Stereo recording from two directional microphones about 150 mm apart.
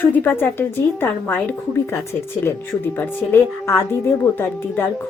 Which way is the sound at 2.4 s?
15° left (ahead or behind).